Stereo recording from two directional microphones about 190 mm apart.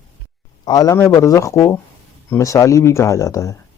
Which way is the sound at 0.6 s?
20° left (ahead or behind).